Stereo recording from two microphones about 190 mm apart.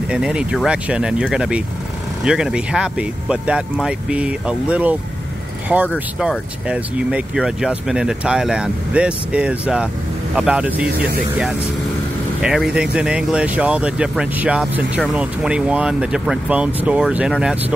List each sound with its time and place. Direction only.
0.1 s speech: 5° right (ahead or behind)
12.4 s speech: 5° right (ahead or behind)